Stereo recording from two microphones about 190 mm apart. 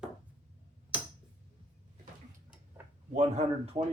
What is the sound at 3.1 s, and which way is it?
Speech, 35° right (ahead or behind).